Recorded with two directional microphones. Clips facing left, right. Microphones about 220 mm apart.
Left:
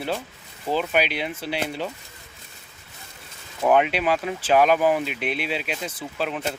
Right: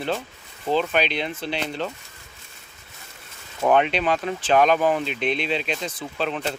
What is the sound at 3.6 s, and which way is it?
Speech, 10° left (ahead or behind).